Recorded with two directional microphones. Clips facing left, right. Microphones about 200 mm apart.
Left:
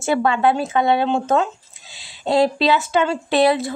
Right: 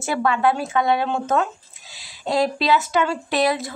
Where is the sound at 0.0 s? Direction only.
25° left (ahead or behind).